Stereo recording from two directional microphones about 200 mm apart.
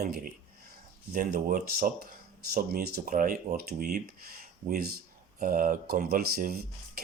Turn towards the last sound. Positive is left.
turn(degrees=-50)  # may be behind; listen again after turning